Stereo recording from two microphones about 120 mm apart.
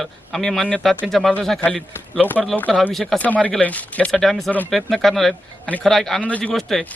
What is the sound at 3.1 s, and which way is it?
Speech, 10° left (ahead or behind).